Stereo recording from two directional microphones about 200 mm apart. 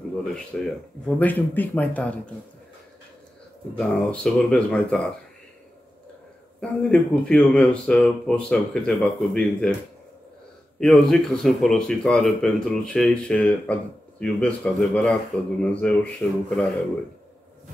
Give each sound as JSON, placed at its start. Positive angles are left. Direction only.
{"t": 0.5, "sound": "speech", "side_deg": 5}
{"t": 3.7, "sound": "speech", "side_deg": 5}
{"t": 6.6, "sound": "speech", "side_deg": 5}
{"t": 10.8, "sound": "speech", "side_deg": 0}